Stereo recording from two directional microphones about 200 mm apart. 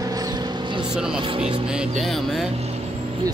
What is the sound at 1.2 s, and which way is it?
Music, 25° right (ahead or behind).